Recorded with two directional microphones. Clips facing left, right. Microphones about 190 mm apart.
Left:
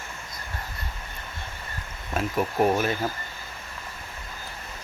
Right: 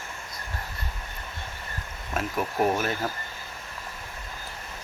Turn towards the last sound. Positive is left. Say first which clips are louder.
# left 2 dB
turn(degrees=0)  # may be behind; listen again after turning